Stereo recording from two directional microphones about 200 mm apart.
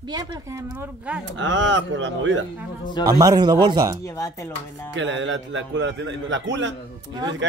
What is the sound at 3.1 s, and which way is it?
Speech, 20° right (ahead or behind).